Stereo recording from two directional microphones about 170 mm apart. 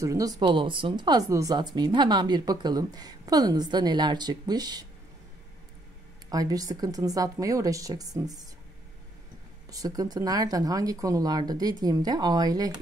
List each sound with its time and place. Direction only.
0.0 s speech: 20° right (ahead or behind)
6.3 s speech: 20° right (ahead or behind)
9.7 s speech: 20° right (ahead or behind)